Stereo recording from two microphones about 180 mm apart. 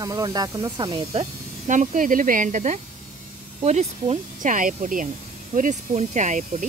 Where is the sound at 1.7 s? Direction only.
45° right (ahead or behind).